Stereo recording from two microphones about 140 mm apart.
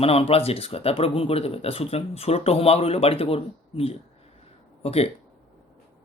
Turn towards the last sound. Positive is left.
turn(degrees=45)  # may be behind; listen again after turning